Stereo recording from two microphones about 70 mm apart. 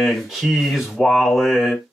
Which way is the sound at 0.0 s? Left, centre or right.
Centre.